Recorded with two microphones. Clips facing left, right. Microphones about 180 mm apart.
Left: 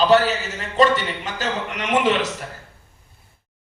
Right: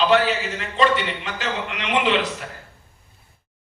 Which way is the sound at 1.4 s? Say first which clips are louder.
Left 2 dB; 45° left (ahead or behind).